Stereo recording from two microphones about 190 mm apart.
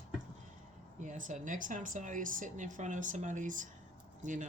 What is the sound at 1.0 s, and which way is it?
Speech, 40° right (ahead or behind).